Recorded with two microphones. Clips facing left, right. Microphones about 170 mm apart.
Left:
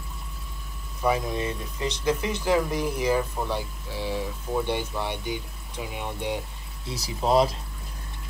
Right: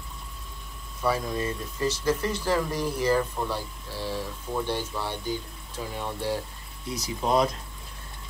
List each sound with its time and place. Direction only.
1.3 s speech: 15° left (ahead or behind)
6.9 s speech: 30° left (ahead or behind)